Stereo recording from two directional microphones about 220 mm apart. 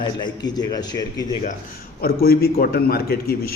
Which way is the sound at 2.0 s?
45° left (ahead or behind).